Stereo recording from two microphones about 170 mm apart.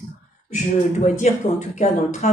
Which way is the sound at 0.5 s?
45° left (ahead or behind).